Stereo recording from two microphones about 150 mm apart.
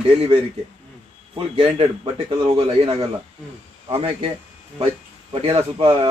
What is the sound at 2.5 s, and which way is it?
Speech, 40° right (ahead or behind).